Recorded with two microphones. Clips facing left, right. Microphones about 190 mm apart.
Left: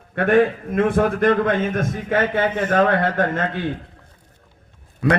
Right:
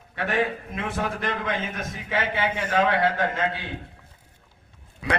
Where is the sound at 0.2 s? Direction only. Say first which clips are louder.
Left 9 dB; 50° left (ahead or behind).